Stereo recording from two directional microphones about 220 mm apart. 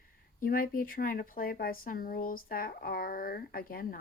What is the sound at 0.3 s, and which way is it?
Speech, 40° left (ahead or behind).